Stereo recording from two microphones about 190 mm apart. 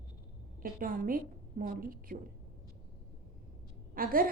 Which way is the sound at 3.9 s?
50° right (ahead or behind).